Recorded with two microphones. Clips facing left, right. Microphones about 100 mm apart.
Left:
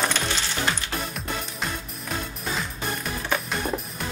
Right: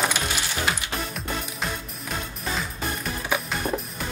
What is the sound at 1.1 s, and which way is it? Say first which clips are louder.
Music: right 1 dB; centre (ahead or behind).